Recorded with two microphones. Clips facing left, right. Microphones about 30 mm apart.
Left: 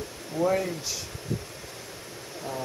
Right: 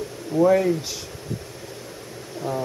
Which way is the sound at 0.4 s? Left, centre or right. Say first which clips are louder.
Right 8 dB; centre.